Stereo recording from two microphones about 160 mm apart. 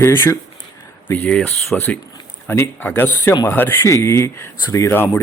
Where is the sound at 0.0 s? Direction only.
15° left (ahead or behind).